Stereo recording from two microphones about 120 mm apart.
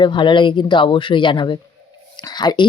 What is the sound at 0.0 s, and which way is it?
Speech, 40° left (ahead or behind).